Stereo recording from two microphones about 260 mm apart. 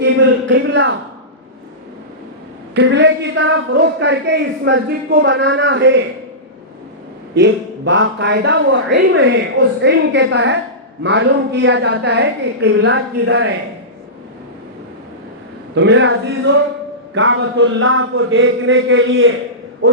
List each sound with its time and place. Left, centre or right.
0.0 s a man's voice: right
2.7 s a man's voice: right
7.3 s a man's voice: right
15.7 s a man's voice: right